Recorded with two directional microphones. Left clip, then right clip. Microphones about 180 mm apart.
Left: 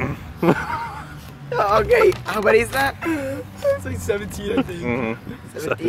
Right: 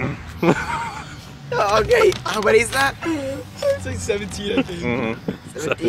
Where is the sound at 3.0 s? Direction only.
20° left (ahead or behind).